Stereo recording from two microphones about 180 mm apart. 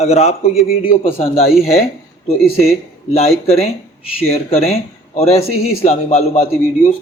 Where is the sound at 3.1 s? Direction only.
35° left (ahead or behind).